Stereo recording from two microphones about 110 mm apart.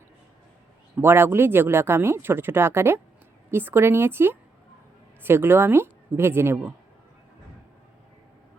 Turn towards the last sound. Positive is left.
turn(degrees=-20)  # may be behind; listen again after turning